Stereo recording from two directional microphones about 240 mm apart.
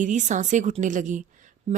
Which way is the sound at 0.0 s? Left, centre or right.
Right.